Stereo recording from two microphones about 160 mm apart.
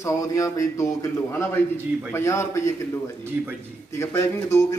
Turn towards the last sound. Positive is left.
turn(degrees=20)  # may be behind; listen again after turning